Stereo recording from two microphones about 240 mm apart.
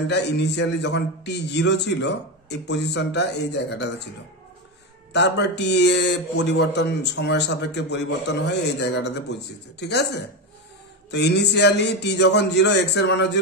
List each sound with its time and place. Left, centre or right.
0.1 s speech: left
5.1 s speech: left